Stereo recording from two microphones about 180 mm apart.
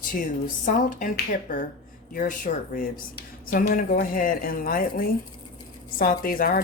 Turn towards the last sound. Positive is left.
turn(degrees=55)  # may be behind; listen again after turning